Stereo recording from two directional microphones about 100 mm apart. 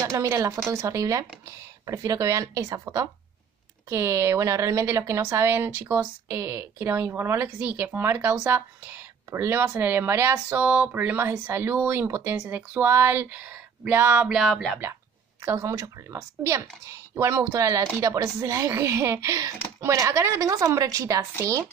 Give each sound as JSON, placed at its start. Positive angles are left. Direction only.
{"t": 0.0, "sound": "a woman's voice", "side_deg": -35}
{"t": 14.3, "sound": "music", "side_deg": 0}
{"t": 15.4, "sound": "speech", "side_deg": -30}